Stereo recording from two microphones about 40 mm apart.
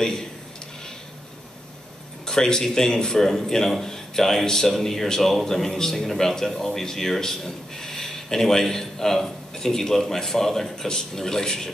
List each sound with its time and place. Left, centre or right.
2.2 s a man's voice: centre